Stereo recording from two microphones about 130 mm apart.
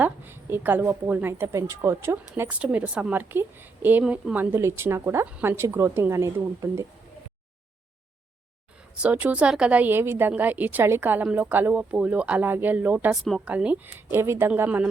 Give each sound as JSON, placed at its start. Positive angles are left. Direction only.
{"t": 0.0, "sound": "a woman's voice", "side_deg": -15}
{"t": 9.0, "sound": "a woman's voice", "side_deg": -10}